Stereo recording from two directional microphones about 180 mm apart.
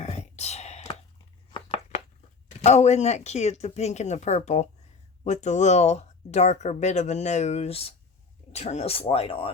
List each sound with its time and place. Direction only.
0.0 s whispering: 35° left (ahead or behind)
1.5 s a sound: 30° left (ahead or behind)
2.5 s speech: 40° left (ahead or behind)